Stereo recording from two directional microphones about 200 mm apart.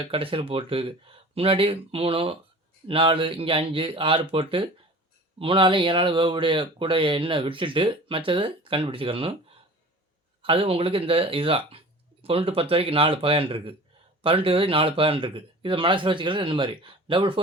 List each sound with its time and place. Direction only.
0.0 s speech: 25° right (ahead or behind)
10.4 s speech: 25° right (ahead or behind)